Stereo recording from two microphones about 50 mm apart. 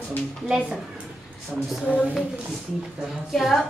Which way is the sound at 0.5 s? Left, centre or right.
Centre.